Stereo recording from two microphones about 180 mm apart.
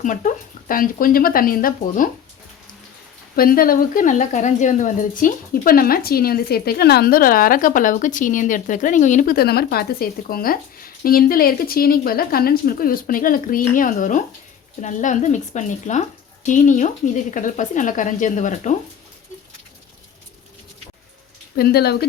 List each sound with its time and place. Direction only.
0.0 s speech: 45° left (ahead or behind)
3.3 s speech: 55° left (ahead or behind)
21.5 s speech: 60° left (ahead or behind)